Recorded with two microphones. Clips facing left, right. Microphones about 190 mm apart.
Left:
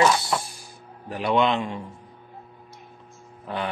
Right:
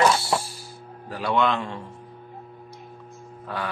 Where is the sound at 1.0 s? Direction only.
20° left (ahead or behind).